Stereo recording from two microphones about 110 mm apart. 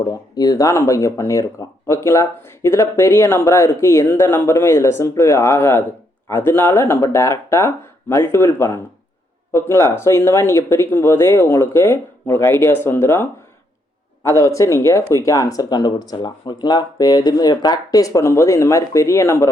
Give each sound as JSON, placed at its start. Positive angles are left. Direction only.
{"t": 0.1, "sound": "speech", "side_deg": 35}
{"t": 14.3, "sound": "speech", "side_deg": 30}